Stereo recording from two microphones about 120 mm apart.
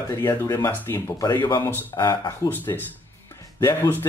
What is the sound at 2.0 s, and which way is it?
Speech, 35° left (ahead or behind).